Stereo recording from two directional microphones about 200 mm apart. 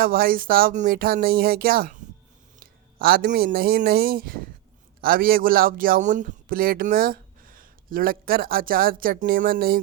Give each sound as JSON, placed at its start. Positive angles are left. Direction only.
{"t": 0.0, "sound": "a man's voice", "side_deg": -45}